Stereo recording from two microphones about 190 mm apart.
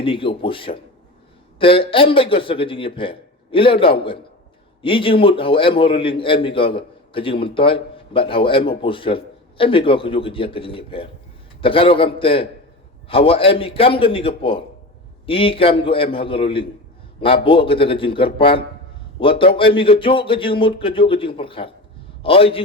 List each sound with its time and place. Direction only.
0.0 s a man's voice: 25° left (ahead or behind)